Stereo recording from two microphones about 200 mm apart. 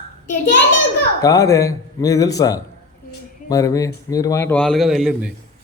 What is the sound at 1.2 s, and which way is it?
A man's voice, 15° left (ahead or behind).